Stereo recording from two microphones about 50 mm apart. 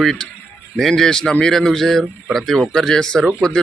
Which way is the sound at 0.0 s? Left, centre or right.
Centre.